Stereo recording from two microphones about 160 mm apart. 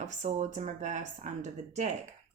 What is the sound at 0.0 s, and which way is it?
Speech, 45° right (ahead or behind).